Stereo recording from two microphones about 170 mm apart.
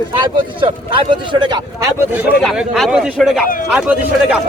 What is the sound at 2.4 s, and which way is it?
Speech, centre (ahead or behind).